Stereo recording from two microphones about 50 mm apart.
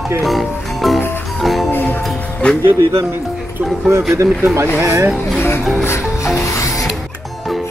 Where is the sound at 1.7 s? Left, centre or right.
Left.